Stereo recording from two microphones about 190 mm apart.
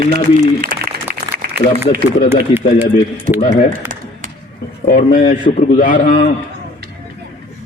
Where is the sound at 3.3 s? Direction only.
40° left (ahead or behind).